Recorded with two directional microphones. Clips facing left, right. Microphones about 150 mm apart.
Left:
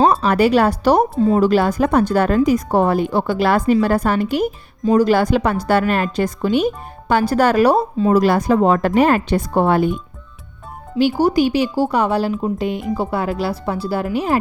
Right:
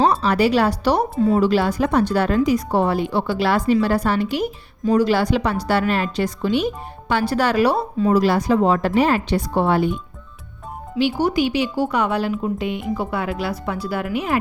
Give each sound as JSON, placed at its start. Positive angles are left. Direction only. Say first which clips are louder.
{"t": 0.0, "sound": "a woman's voice", "louder": "left 3 dB", "side_deg": 50}
{"t": 10.9, "sound": "speech", "louder": "left 4 dB", "side_deg": 40}